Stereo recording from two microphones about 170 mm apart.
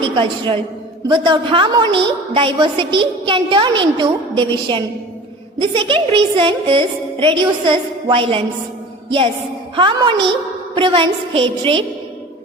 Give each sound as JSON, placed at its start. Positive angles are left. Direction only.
{"t": 0.0, "sound": "a woman's voice", "side_deg": -30}